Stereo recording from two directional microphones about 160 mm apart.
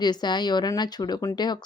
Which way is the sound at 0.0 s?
25° left (ahead or behind).